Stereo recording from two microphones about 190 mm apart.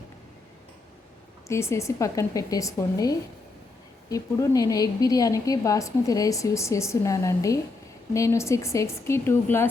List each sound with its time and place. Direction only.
1.5 s a woman's voice: 15° left (ahead or behind)